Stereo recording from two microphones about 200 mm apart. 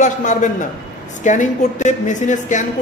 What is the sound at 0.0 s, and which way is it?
A woman's voice, 40° left (ahead or behind).